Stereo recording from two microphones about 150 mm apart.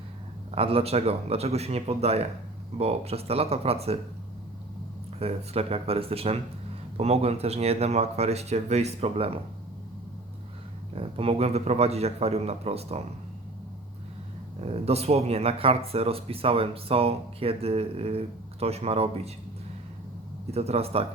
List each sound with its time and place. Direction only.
0.5 s speech: 40° right (ahead or behind)
5.2 s speech: 40° right (ahead or behind)
10.9 s speech: 40° right (ahead or behind)
14.6 s speech: 45° right (ahead or behind)
20.5 s speech: 45° right (ahead or behind)